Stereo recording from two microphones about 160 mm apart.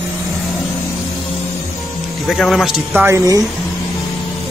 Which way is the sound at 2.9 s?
15° right (ahead or behind).